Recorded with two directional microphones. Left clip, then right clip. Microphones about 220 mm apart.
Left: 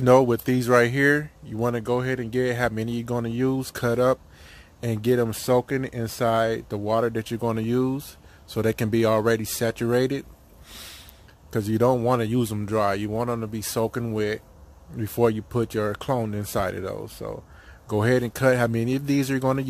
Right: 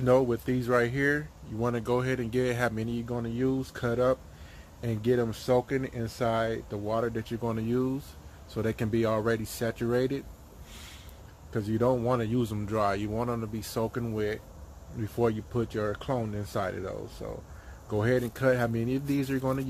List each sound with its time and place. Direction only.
0.0 s speech: 45° left (ahead or behind)
1.7 s speech: 30° left (ahead or behind); by 10.2 s 45° left (ahead or behind)
10.7 s a sound: 45° left (ahead or behind)
11.5 s speech: 50° left (ahead or behind)